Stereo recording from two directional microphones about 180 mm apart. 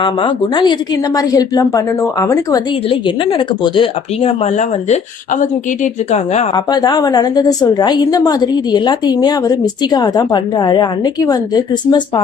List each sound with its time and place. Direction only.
0.0 s a woman's voice: 30° left (ahead or behind)
6.5 s a woman's voice: 25° left (ahead or behind)